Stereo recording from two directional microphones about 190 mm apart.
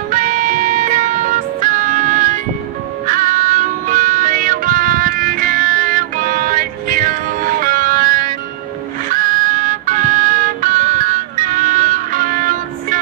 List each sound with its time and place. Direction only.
0.1 s music: 45° right (ahead or behind)